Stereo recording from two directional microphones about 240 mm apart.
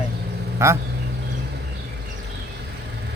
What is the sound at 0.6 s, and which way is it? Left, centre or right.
Speech, centre.